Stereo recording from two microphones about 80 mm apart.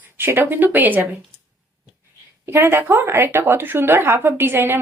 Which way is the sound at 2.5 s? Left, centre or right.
Right.